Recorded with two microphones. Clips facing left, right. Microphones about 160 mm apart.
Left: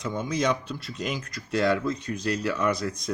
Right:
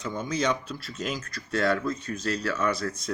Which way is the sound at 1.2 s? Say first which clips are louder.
Left 2 dB; 15° left (ahead or behind).